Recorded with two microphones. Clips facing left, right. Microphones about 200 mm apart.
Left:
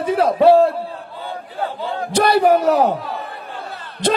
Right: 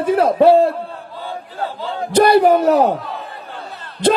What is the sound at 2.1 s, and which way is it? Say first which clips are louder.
Speech: right 3 dB; 60° right (ahead or behind).